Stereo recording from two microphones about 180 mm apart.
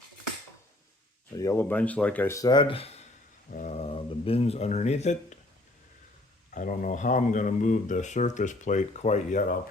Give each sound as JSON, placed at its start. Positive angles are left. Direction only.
{"t": 1.4, "sound": "speech", "side_deg": 15}
{"t": 6.5, "sound": "speech", "side_deg": 45}